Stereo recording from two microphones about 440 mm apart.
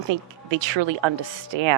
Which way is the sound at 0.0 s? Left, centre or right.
Right.